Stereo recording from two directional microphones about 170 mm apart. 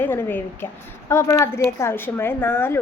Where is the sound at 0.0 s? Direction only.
15° left (ahead or behind).